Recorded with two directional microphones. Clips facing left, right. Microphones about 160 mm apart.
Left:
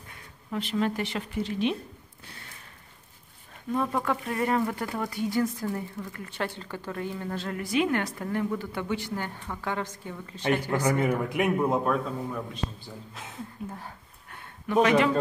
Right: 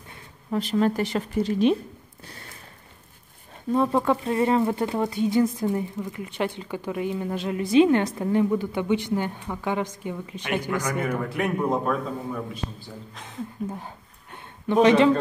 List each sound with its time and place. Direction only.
0.1 s a woman's voice: 40° right (ahead or behind)
3.7 s speech: 30° right (ahead or behind)
11.0 s a man's voice: 15° left (ahead or behind)
13.7 s a sound: 20° right (ahead or behind)